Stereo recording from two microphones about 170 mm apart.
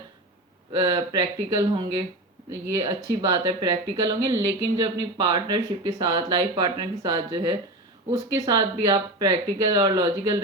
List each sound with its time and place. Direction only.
0.9 s speech: 25° right (ahead or behind)